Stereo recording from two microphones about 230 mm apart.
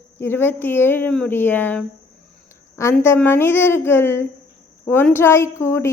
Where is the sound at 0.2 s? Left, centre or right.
Centre.